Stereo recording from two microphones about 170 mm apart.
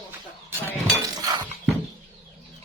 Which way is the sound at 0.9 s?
20° right (ahead or behind).